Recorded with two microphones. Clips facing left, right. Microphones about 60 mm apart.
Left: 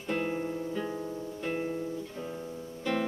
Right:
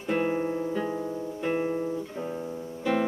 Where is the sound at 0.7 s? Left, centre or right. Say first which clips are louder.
Right 4 dB; centre.